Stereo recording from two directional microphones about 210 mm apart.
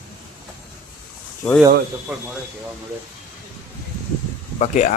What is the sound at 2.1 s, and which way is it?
Speech, 5° right (ahead or behind).